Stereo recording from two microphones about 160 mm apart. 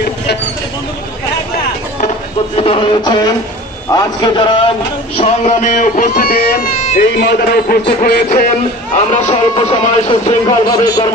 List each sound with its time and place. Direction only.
2.5 s a man's voice: 35° left (ahead or behind)
5.1 s a man's voice: 40° left (ahead or behind)
9.3 s speech: 40° left (ahead or behind)